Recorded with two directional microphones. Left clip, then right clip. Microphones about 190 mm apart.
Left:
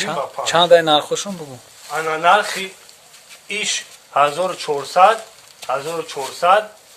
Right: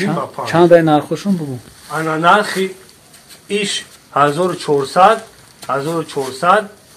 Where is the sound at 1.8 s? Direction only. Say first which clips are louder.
Right 3 dB; 30° left (ahead or behind).